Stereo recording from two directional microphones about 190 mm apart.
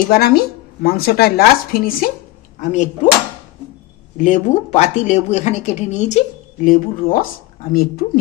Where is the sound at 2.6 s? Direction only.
40° left (ahead or behind).